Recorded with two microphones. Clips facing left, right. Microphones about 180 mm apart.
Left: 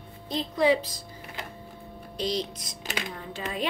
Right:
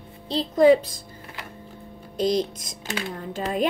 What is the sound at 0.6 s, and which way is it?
Speech, 50° right (ahead or behind).